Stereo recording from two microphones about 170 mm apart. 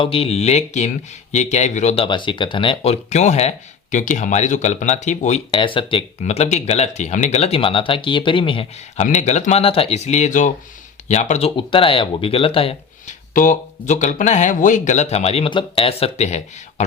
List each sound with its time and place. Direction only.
0.0 s speech: 35° left (ahead or behind)
2.0 s speech: 30° left (ahead or behind)
5.5 s speech: 30° left (ahead or behind)
9.0 s speech: 45° left (ahead or behind)
13.3 s speech: 50° left (ahead or behind)